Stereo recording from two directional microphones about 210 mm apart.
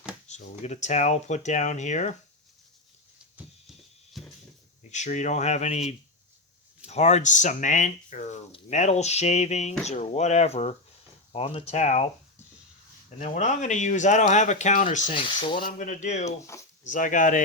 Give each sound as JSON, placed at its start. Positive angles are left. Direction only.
{"t": 0.3, "sound": "speech", "side_deg": 35}
{"t": 3.3, "sound": "a sound", "side_deg": 0}
{"t": 4.9, "sound": "speech", "side_deg": 35}
{"t": 13.1, "sound": "speech", "side_deg": 35}
{"t": 15.1, "sound": "speech", "side_deg": 25}
{"t": 15.8, "sound": "speech", "side_deg": 35}